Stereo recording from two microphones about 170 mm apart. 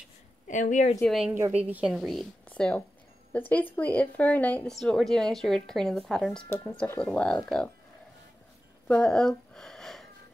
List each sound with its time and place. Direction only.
0.5 s a woman's voice: 45° left (ahead or behind)
1.0 s speech: centre (ahead or behind)
6.5 s speech: 15° left (ahead or behind)
8.8 s speech: 5° left (ahead or behind)
9.5 s a sound: 5° left (ahead or behind)